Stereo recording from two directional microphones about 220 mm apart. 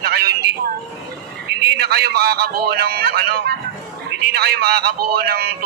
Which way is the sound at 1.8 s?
45° right (ahead or behind).